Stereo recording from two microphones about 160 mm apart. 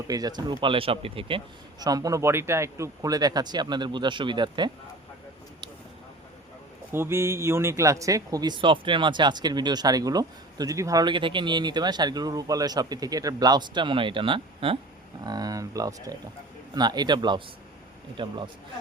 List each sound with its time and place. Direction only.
0.1 s speech: 25° right (ahead or behind)
1.8 s speech: 25° right (ahead or behind)
6.9 s speech: 15° right (ahead or behind)